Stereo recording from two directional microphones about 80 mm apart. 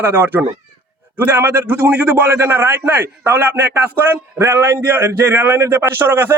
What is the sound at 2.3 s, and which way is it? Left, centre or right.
A man's voice, right.